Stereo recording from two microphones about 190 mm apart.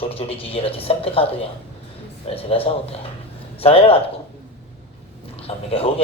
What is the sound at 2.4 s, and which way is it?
A man's voice, 30° left (ahead or behind).